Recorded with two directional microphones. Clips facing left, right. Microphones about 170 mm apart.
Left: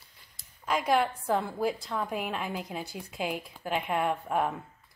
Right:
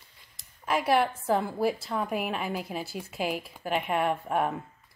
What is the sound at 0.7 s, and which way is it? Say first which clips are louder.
A woman's voice: right 2 dB; 5° right (ahead or behind).